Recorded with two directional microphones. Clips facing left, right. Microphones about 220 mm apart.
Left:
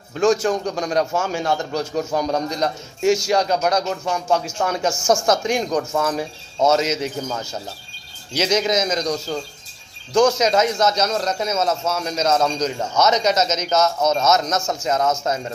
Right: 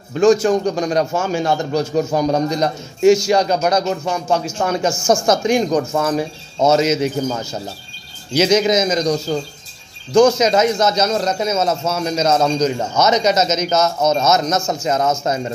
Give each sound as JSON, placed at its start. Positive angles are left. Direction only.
{"t": 0.1, "sound": "a man's voice", "side_deg": 0}
{"t": 8.3, "sound": "a man's voice", "side_deg": -5}
{"t": 12.3, "sound": "a man's voice", "side_deg": -20}
{"t": 12.6, "sound": "a man's voice", "side_deg": -5}